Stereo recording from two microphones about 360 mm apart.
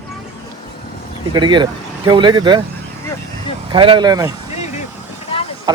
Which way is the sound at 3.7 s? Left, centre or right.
Centre.